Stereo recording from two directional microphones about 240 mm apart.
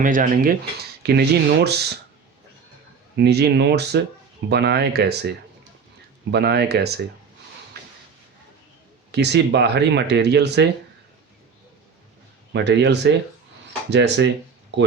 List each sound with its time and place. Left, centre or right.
0.0 s speech: right
3.2 s speech: right
6.3 s speech: right
9.1 s speech: right
12.5 s speech: right